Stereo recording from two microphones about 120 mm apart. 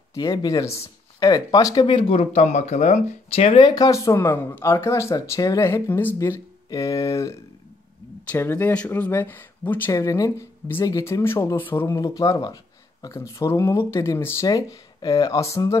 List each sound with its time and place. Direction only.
0.1 s speech: 30° left (ahead or behind); by 3.0 s 75° left (ahead or behind)
3.3 s speech: 55° left (ahead or behind); by 9.9 s 15° left (ahead or behind)
9.9 s speech: 30° left (ahead or behind)
12.0 s speech: 30° left (ahead or behind)